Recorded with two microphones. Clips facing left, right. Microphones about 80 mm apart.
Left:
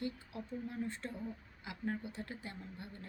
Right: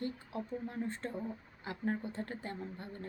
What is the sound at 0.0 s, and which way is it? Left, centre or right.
Speech, right.